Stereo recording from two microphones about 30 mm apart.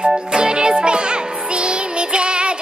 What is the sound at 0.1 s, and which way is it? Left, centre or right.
Music, right.